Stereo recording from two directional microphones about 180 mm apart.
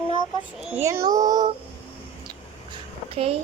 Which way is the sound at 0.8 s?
15° right (ahead or behind).